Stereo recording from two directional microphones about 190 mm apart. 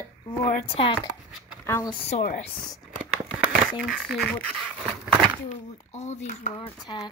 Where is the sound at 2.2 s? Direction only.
40° left (ahead or behind).